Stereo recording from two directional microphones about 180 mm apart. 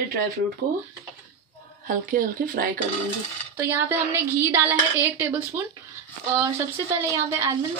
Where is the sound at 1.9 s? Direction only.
50° right (ahead or behind).